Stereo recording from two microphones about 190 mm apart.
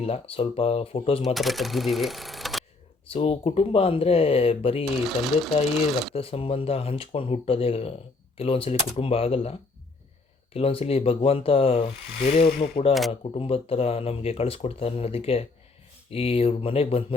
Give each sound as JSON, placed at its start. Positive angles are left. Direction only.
{"t": 0.0, "sound": "speech", "side_deg": 30}
{"t": 1.2, "sound": "speech", "side_deg": 0}
{"t": 3.1, "sound": "speech", "side_deg": 30}
{"t": 5.0, "sound": "speech", "side_deg": 0}
{"t": 6.1, "sound": "speech", "side_deg": 30}
{"t": 12.5, "sound": "speech", "side_deg": 45}
{"t": 13.1, "sound": "speech", "side_deg": 30}